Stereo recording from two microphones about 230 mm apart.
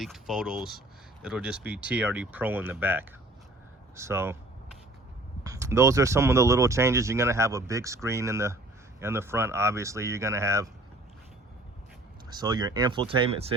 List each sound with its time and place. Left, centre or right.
0.0 s speech: centre
5.4 s speech: centre
12.3 s speech: centre